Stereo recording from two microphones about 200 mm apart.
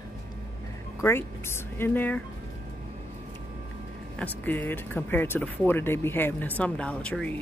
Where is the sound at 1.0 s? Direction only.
10° left (ahead or behind).